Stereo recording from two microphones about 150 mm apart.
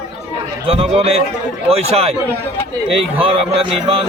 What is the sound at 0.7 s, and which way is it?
A man's voice, 40° right (ahead or behind).